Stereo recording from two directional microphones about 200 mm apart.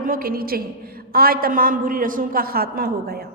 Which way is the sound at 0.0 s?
45° right (ahead or behind).